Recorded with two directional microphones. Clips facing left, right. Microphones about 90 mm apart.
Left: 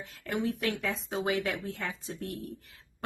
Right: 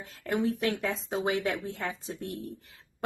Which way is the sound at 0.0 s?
30° right (ahead or behind).